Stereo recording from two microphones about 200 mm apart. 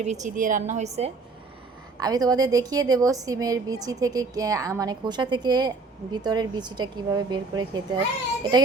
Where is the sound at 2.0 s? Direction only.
20° right (ahead or behind).